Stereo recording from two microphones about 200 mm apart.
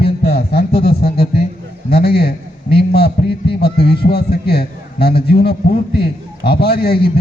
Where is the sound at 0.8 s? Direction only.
50° left (ahead or behind).